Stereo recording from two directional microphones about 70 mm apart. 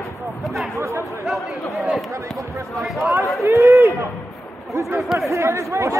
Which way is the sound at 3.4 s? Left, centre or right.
Right.